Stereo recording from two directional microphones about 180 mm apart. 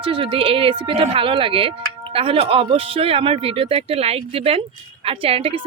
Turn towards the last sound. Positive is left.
turn(degrees=-35)  # may be behind; listen again after turning